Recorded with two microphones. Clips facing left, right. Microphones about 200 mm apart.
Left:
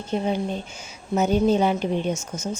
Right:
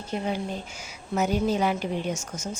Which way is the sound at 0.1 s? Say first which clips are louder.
Left 5 dB; 20° left (ahead or behind).